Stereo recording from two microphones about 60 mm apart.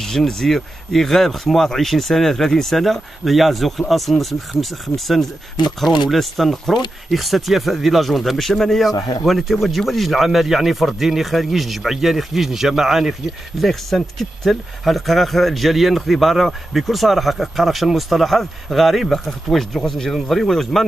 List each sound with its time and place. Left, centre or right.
0.0 s speech: centre
8.9 s a man's voice: left
9.2 s speech: centre